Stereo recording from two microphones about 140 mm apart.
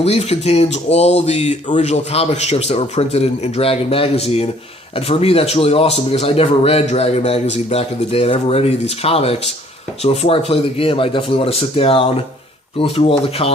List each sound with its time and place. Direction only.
0.0 s a man's voice: 50° left (ahead or behind)